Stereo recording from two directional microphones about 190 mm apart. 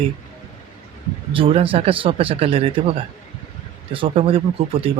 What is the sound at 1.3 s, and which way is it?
Speech, 30° right (ahead or behind).